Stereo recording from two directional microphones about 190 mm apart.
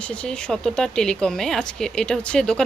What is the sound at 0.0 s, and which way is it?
Speech, 5° left (ahead or behind).